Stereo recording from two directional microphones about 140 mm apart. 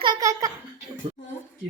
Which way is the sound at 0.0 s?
30° right (ahead or behind).